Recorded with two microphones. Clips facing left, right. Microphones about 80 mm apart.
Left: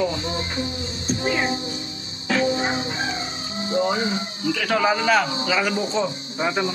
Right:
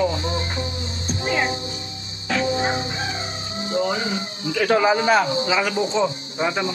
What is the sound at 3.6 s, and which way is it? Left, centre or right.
Speech, left.